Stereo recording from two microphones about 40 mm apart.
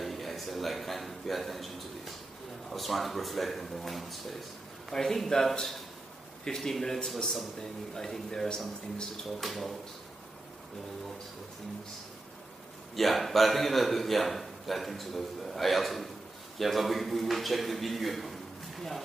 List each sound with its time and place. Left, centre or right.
0.0 s a sound: centre
2.7 s a man's voice: centre
9.4 s a man's voice: centre
12.9 s a man's voice: centre